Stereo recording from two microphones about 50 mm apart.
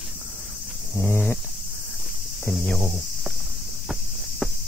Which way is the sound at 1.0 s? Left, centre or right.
Left.